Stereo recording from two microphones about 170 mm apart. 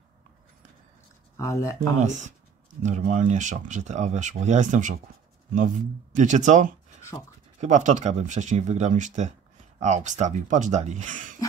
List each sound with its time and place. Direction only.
1.3 s speech: 20° left (ahead or behind)
2.0 s speech: 45° right (ahead or behind)